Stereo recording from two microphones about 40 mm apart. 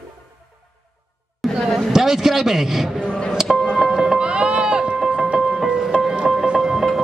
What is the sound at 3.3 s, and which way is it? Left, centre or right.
Music, centre.